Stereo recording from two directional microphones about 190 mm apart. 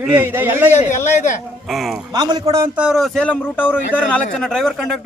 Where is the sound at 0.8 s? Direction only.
40° left (ahead or behind).